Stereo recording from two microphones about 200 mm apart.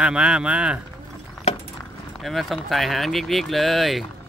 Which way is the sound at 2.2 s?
Centre (ahead or behind).